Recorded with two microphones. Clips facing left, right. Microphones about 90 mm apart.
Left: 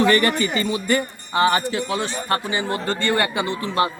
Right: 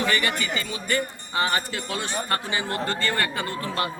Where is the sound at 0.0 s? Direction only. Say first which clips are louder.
Left 7 dB; 45° left (ahead or behind).